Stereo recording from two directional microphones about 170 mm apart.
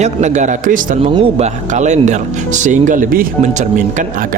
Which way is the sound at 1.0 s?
35° right (ahead or behind).